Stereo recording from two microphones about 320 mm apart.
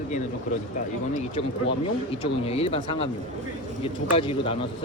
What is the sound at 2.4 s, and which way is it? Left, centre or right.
Speech, centre.